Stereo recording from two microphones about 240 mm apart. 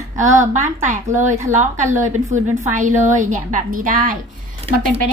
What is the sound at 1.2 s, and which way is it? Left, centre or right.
A woman's voice, right.